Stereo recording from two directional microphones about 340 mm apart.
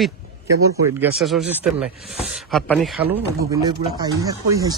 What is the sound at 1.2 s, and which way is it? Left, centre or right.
Speech, centre.